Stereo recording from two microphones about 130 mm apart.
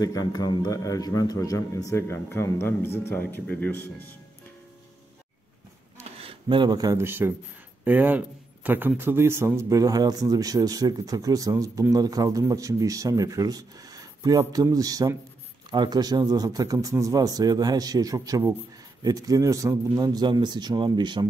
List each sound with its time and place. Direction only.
0.0 s a man's voice: 30° left (ahead or behind); by 4.1 s 15° left (ahead or behind)
5.9 s a man's voice: 45° right (ahead or behind)